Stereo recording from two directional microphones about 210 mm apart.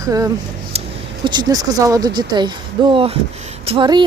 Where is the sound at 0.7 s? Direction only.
30° right (ahead or behind).